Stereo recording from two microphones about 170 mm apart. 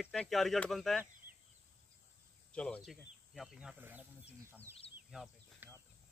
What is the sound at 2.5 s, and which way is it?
Speech, 5° left (ahead or behind).